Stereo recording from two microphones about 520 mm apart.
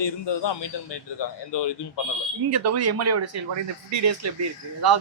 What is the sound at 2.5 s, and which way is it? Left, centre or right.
Speech, right.